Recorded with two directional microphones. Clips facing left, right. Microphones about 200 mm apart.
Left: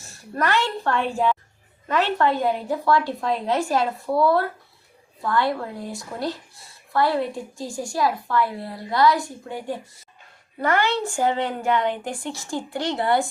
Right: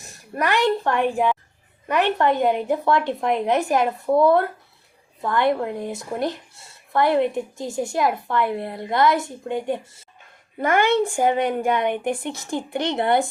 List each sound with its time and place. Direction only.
0.0 s a woman's voice: 15° right (ahead or behind)